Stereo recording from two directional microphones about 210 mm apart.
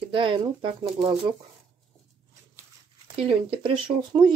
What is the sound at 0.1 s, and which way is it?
Speech, 25° right (ahead or behind).